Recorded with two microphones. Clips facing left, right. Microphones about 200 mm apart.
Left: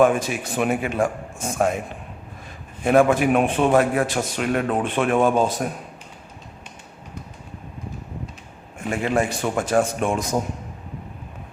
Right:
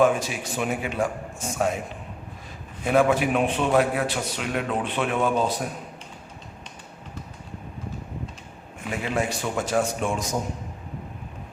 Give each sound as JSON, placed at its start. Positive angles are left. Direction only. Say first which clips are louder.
{"t": 0.0, "sound": "a man's voice", "louder": "left 3 dB", "side_deg": 55}
{"t": 2.8, "sound": "a man's voice", "louder": "left 4 dB", "side_deg": 50}
{"t": 8.9, "sound": "a man's voice", "louder": "left 5 dB", "side_deg": 50}